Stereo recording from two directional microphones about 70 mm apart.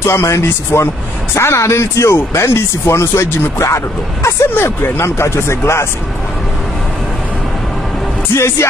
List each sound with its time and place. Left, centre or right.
0.0 s speech: left
8.4 s speech: left